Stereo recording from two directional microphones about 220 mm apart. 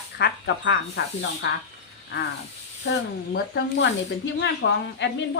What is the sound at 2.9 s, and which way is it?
Speech, 55° left (ahead or behind).